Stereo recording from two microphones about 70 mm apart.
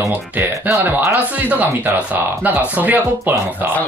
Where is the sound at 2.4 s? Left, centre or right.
Right.